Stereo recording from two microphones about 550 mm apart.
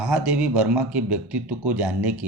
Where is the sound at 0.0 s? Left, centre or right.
Centre.